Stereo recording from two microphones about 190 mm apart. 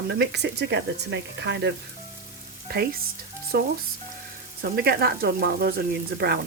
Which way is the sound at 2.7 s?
55° right (ahead or behind).